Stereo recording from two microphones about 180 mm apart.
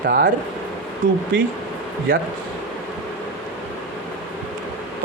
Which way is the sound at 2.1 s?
55° right (ahead or behind).